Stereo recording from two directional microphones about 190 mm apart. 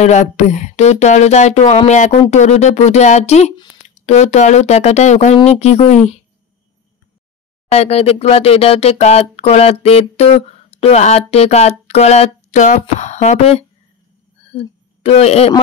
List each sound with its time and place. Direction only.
0.0 s speech: 40° left (ahead or behind)
7.7 s speech: 35° left (ahead or behind)